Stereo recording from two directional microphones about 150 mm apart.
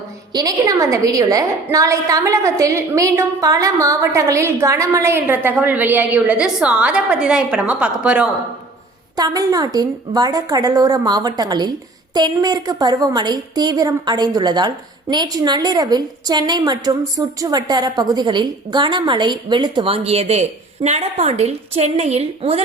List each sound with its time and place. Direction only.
0.3 s a woman's voice: 25° right (ahead or behind); by 8.3 s 10° right (ahead or behind)
9.1 s a woman's voice: 25° right (ahead or behind); by 22.6 s 40° right (ahead or behind)